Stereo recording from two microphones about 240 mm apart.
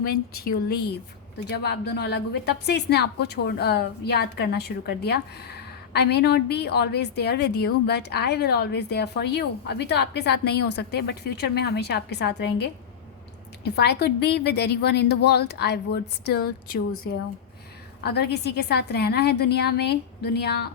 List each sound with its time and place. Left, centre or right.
0.0 s a woman's voice: left
13.7 s a woman's voice: left
18.0 s a woman's voice: left